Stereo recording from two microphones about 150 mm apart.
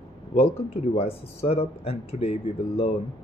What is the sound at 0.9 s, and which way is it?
Speech, 40° left (ahead or behind).